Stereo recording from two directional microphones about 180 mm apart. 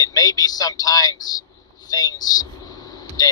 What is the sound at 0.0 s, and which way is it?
Speech, 20° left (ahead or behind).